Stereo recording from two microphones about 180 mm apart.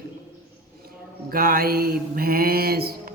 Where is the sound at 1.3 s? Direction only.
60° right (ahead or behind).